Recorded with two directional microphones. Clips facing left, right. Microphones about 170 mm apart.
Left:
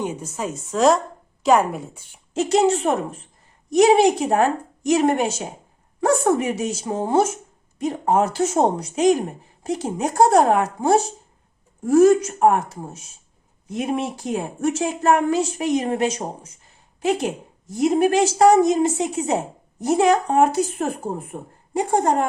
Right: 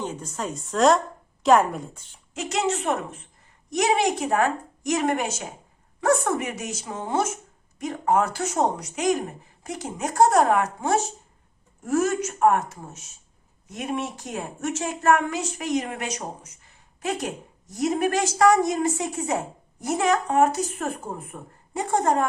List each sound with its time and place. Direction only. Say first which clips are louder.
0.0 s a woman's voice: left 4 dB; 10° left (ahead or behind)
2.3 s a woman's voice: left 8 dB; 30° left (ahead or behind)